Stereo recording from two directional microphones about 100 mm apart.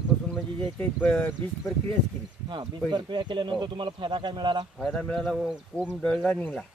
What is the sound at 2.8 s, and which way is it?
Speech, 55° right (ahead or behind).